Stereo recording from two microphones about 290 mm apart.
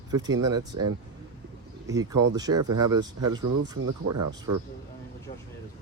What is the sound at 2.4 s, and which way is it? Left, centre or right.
Speech, centre.